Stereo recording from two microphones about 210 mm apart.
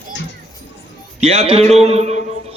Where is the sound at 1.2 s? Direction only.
30° right (ahead or behind).